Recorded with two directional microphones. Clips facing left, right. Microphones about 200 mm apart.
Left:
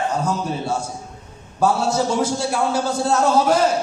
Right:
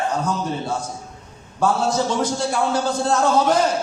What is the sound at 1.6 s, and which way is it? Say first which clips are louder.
A man's voice: left 1 dB; 10° left (ahead or behind).